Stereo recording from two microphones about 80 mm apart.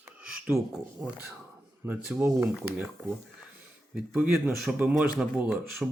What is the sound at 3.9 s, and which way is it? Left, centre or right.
Speech, centre.